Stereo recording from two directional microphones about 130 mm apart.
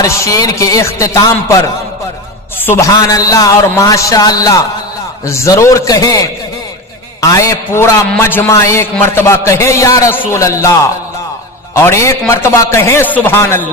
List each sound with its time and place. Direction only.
0.0 s a man's voice: 25° left (ahead or behind)
2.9 s a man's voice: 25° left (ahead or behind)
7.2 s a man's voice: 25° left (ahead or behind)